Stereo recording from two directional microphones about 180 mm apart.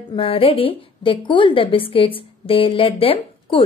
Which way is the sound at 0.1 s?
30° left (ahead or behind).